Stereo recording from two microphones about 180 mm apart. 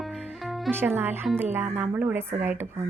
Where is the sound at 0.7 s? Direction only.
10° right (ahead or behind).